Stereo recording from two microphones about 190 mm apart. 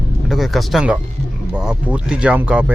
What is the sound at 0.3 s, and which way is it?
Speech, centre (ahead or behind).